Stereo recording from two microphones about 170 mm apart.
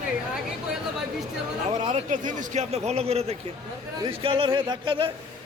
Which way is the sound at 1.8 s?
40° right (ahead or behind).